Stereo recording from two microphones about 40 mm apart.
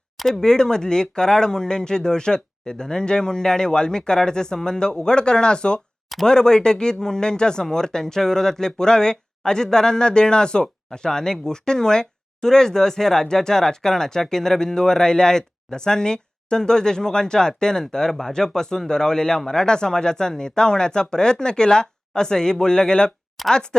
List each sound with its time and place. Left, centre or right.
0.2 s speech: centre